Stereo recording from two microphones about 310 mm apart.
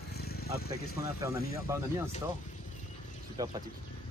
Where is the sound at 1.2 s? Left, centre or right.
Centre.